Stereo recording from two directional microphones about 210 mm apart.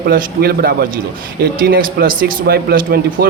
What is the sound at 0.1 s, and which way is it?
A man's voice, 45° right (ahead or behind).